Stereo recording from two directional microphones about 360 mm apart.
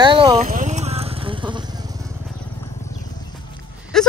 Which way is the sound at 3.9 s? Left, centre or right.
Centre.